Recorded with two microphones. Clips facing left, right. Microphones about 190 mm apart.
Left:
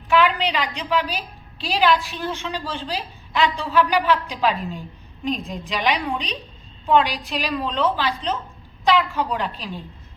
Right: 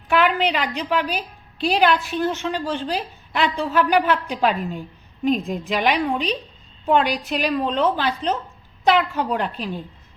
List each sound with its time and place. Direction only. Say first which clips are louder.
0.1 s a woman's voice: even; 50° right (ahead or behind)